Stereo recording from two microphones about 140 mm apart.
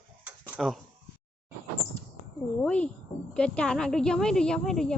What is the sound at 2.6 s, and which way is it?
A woman's voice, 10° left (ahead or behind).